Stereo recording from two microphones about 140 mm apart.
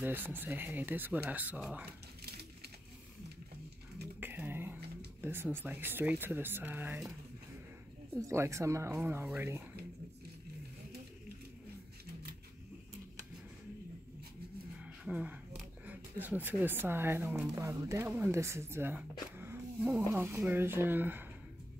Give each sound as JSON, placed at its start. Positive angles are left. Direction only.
{"t": 0.0, "sound": "speech", "side_deg": -15}
{"t": 4.2, "sound": "whispering", "side_deg": -15}
{"t": 5.2, "sound": "speech", "side_deg": -15}
{"t": 8.1, "sound": "speech", "side_deg": -20}
{"t": 15.0, "sound": "speech", "side_deg": -10}